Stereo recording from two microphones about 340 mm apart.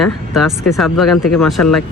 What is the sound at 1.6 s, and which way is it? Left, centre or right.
Speech, left.